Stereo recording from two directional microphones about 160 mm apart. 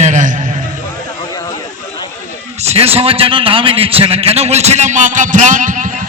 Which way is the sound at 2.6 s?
40° right (ahead or behind).